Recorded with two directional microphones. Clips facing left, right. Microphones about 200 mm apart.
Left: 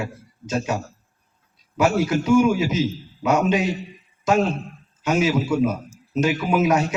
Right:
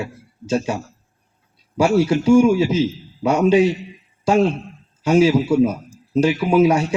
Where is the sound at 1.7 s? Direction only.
30° right (ahead or behind).